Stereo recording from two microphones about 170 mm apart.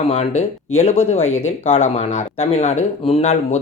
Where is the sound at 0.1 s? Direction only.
40° left (ahead or behind).